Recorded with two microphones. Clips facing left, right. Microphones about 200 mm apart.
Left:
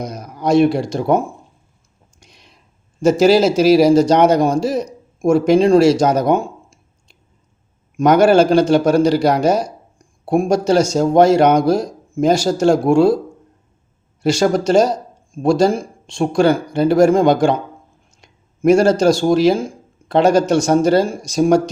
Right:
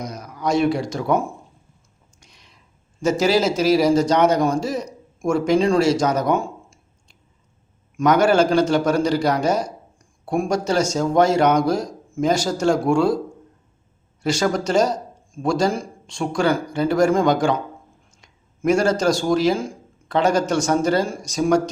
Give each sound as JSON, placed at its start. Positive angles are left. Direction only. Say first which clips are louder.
{"t": 0.0, "sound": "a sound", "louder": "left 4 dB", "side_deg": 30}
{"t": 0.5, "sound": "speech", "louder": "left 6 dB", "side_deg": 60}
{"t": 0.8, "sound": "a man's voice", "louder": "left 5 dB", "side_deg": 30}
{"t": 3.0, "sound": "speech", "louder": "left 6 dB", "side_deg": 30}
{"t": 8.0, "sound": "speech", "louder": "left 5 dB", "side_deg": 30}
{"t": 14.2, "sound": "a man's voice", "louder": "left 5 dB", "side_deg": 30}
{"t": 18.7, "sound": "a man's voice", "louder": "left 6 dB", "side_deg": 30}
{"t": 19.5, "sound": "a sound", "louder": "left 5 dB", "side_deg": 30}
{"t": 20.2, "sound": "speech", "louder": "left 5 dB", "side_deg": 30}